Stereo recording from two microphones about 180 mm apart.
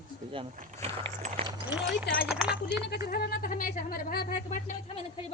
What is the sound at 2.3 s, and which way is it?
Speech, 5° right (ahead or behind).